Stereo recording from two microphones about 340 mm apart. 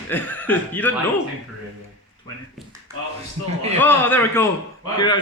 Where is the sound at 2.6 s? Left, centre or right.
Centre.